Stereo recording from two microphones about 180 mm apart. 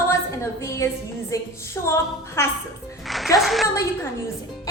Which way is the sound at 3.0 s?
Centre (ahead or behind).